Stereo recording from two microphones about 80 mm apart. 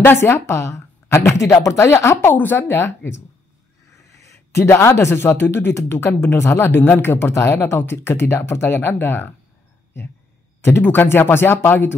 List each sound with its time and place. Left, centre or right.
0.0 s speech: left
4.2 s speech: left
10.6 s speech: left